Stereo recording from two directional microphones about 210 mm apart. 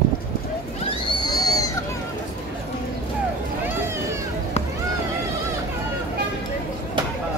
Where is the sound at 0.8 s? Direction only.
20° left (ahead or behind).